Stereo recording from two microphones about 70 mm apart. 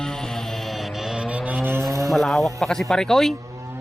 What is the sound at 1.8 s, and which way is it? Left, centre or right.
Cattle, right.